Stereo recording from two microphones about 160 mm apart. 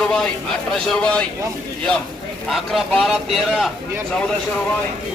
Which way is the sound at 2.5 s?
Centre (ahead or behind).